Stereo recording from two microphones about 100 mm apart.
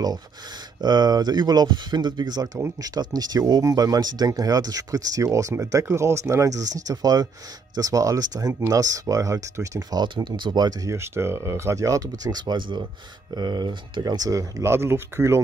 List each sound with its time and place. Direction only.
0.7 s speech: 45° right (ahead or behind)
14.6 s speech: 25° right (ahead or behind)